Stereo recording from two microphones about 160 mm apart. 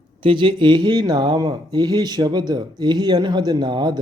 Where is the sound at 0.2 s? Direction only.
30° right (ahead or behind).